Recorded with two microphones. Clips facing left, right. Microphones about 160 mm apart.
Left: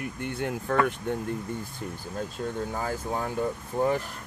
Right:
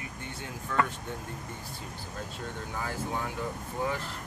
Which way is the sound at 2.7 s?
45° left (ahead or behind).